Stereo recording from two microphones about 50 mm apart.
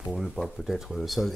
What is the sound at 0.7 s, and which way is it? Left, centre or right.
Speech, centre.